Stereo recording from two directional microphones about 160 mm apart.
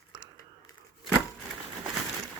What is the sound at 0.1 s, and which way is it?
Crumpling, 30° right (ahead or behind).